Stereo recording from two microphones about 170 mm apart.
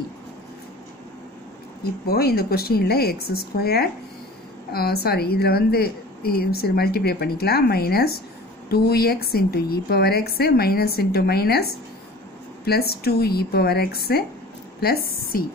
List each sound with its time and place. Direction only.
1.8 s a woman's voice: 65° left (ahead or behind)
12.6 s a woman's voice: 65° left (ahead or behind)